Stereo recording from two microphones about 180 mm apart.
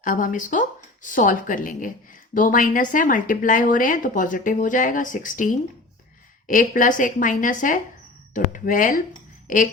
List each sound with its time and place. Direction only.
0.0 s speech: 45° left (ahead or behind)